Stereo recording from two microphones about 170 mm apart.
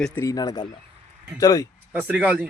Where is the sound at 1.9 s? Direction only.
10° right (ahead or behind).